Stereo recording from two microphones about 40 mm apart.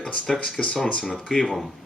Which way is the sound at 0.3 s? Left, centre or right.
Centre.